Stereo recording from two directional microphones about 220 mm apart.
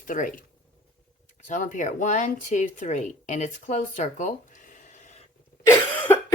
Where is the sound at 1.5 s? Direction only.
35° left (ahead or behind).